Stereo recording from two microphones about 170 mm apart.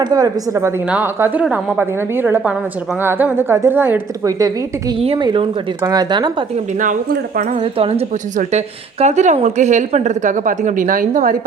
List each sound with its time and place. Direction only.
0.0 s a woman's voice: 20° right (ahead or behind)
4.9 s speech: 30° right (ahead or behind)
6.7 s a woman's voice: 50° right (ahead or behind)
7.5 s a woman's voice: 30° right (ahead or behind); by 11.3 s 55° right (ahead or behind)